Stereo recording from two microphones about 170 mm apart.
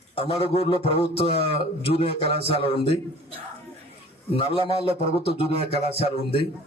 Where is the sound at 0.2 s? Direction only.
35° left (ahead or behind).